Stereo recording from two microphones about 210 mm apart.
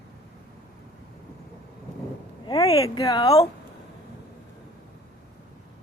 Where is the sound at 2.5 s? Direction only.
15° left (ahead or behind).